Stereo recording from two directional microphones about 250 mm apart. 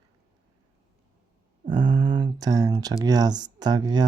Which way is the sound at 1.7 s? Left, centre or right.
Centre.